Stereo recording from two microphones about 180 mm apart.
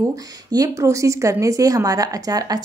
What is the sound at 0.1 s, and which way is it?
A woman's voice, 20° right (ahead or behind).